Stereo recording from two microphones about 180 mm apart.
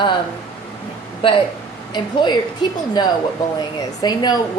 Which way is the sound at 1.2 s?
30° left (ahead or behind).